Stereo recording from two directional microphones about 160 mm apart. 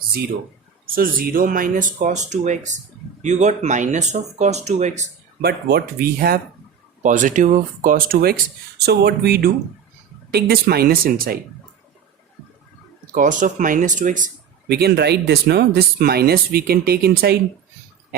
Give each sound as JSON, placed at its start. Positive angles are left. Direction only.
{"t": 0.9, "sound": "speech", "side_deg": -60}
{"t": 5.4, "sound": "speech", "side_deg": -85}
{"t": 7.0, "sound": "speech", "side_deg": -55}
{"t": 8.8, "sound": "speech", "side_deg": -90}
{"t": 13.1, "sound": "speech", "side_deg": -55}
{"t": 14.7, "sound": "speech", "side_deg": -85}